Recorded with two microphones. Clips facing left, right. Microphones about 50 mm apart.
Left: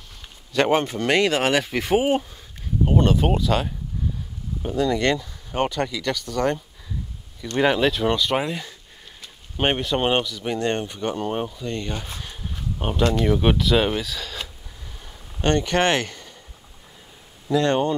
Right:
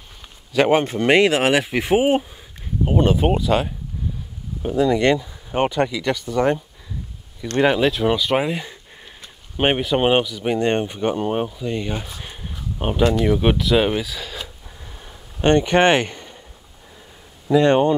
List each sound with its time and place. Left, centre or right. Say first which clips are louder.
0.5 s speech: right 3 dB; centre
7.6 s speech: right 2 dB; centre
12.2 s a sound: right 1 dB; centre
12.7 s speech: right 3 dB; centre
15.0 s a sound: right 4 dB; centre
17.5 s speech: right 5 dB; centre